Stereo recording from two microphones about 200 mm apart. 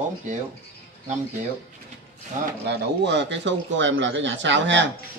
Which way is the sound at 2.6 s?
60° right (ahead or behind).